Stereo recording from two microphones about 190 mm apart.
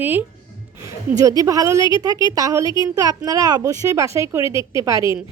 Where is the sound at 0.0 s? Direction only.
10° right (ahead or behind).